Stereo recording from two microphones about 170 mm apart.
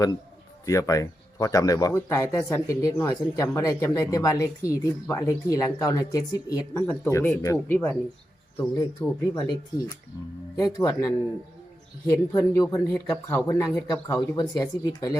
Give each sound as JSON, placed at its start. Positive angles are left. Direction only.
{"t": 0.6, "sound": "speech", "side_deg": 20}
{"t": 10.6, "sound": "speech", "side_deg": 20}